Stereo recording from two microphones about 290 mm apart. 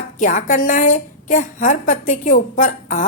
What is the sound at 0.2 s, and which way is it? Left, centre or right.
A woman's voice, left.